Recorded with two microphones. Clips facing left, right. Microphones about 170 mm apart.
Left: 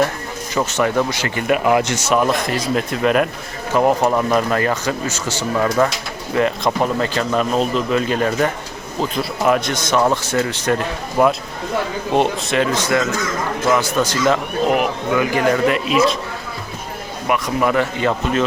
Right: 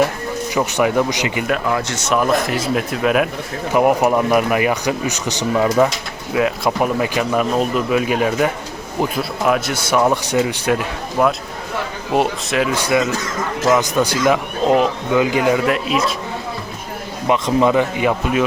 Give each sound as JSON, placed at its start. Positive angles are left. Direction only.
{"t": 0.5, "sound": "speech", "side_deg": -15}
{"t": 1.6, "sound": "speech", "side_deg": 15}
{"t": 3.7, "sound": "speech", "side_deg": -15}
{"t": 6.3, "sound": "speech", "side_deg": -5}
{"t": 11.2, "sound": "speech", "side_deg": 0}
{"t": 15.6, "sound": "speech", "side_deg": 0}
{"t": 17.2, "sound": "speech", "side_deg": -25}